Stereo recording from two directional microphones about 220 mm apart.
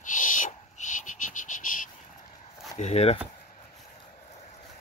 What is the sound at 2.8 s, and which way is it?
Speech, 30° left (ahead or behind).